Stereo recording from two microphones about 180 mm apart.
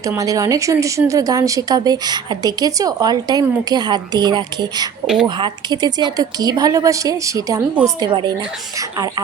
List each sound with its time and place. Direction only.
0.2 s speech: 20° right (ahead or behind)